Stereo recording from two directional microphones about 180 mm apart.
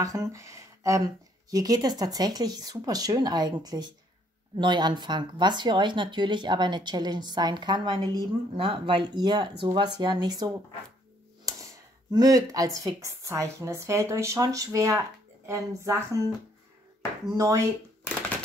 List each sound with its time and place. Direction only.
0.0 s speech: 20° right (ahead or behind)
12.1 s a woman's voice: 20° right (ahead or behind)